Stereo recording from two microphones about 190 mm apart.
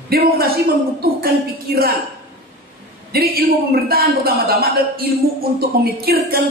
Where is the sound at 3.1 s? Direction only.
55° right (ahead or behind).